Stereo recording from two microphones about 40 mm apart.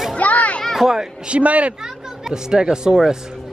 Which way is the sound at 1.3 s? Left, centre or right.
Right.